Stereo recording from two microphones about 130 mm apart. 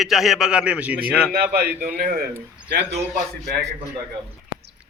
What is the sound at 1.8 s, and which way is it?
Speech, 90° right.